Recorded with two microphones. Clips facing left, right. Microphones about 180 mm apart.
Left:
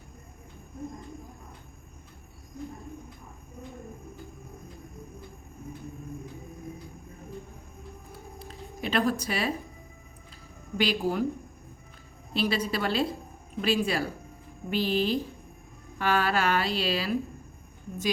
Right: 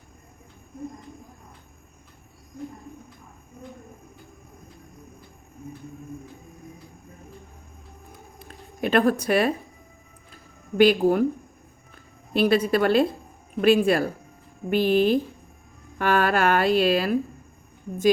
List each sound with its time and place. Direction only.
8.4 s a sound: 55° right (ahead or behind)
10.8 s a woman's voice: 55° right (ahead or behind)
12.3 s a woman's voice: 55° right (ahead or behind)